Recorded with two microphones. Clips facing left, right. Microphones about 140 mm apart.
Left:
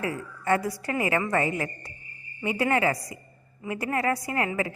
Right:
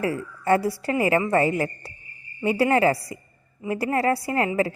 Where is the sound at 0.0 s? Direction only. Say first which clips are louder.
Right 5 dB; 30° right (ahead or behind).